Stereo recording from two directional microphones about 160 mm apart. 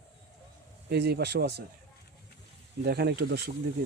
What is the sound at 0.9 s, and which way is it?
Speech, 90° right.